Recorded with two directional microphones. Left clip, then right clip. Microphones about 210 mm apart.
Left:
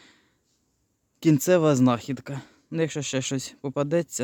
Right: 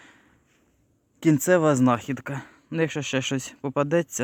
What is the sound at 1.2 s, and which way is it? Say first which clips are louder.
Speech: even; 25° left (ahead or behind).